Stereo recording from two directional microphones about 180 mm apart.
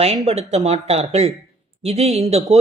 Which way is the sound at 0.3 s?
35° right (ahead or behind).